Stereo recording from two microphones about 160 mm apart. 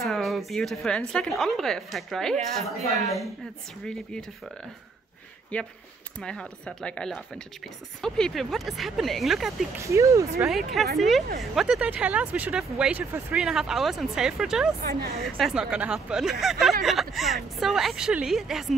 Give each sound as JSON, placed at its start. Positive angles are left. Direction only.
{"t": 0.0, "sound": "speech", "side_deg": 0}
{"t": 2.8, "sound": "a woman's voice", "side_deg": 20}
{"t": 5.5, "sound": "speech", "side_deg": 10}
{"t": 9.8, "sound": "speech", "side_deg": -20}
{"t": 10.4, "sound": "speech", "side_deg": 0}
{"t": 14.8, "sound": "a woman's voice", "side_deg": -70}
{"t": 15.2, "sound": "speech", "side_deg": 0}